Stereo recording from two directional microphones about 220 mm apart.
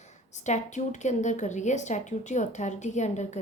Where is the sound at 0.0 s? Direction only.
30° left (ahead or behind).